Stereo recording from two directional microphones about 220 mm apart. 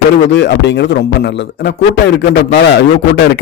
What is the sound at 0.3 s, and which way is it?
Speech, 50° left (ahead or behind).